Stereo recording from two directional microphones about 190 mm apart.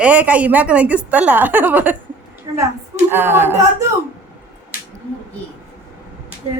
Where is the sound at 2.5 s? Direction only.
25° right (ahead or behind).